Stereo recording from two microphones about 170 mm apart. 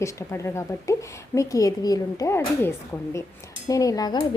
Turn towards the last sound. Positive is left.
turn(degrees=25)  # may be behind; listen again after turning